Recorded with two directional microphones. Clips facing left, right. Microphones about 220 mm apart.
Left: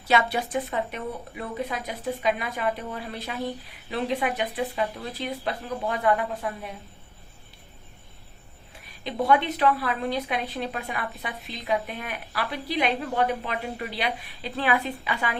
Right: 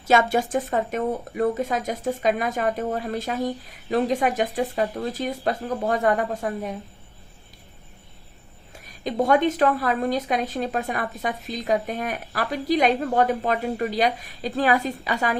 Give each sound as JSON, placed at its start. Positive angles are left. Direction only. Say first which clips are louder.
{"t": 0.0, "sound": "speech", "louder": "right 4 dB", "side_deg": -45}
{"t": 8.8, "sound": "speech", "louder": "right 5 dB", "side_deg": -45}